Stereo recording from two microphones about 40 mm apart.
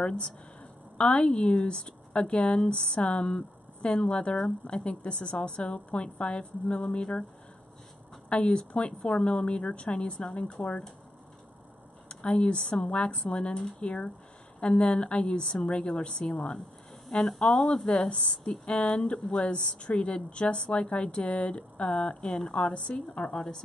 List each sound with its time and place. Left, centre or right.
0.0 s a woman's voice: left
8.3 s speech: left
12.1 s a sound: left
12.9 s speech: left
17.1 s speech: left